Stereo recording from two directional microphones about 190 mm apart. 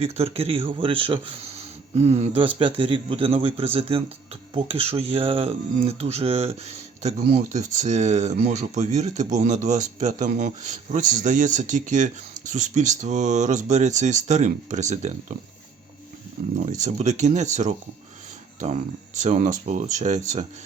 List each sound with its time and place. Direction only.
0.0 s speech: 30° right (ahead or behind)
16.6 s speech: 40° right (ahead or behind)